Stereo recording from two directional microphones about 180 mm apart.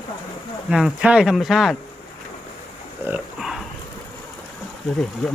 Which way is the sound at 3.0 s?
5° right (ahead or behind).